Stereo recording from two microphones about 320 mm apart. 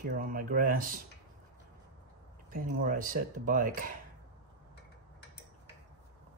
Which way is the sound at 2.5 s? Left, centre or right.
Right.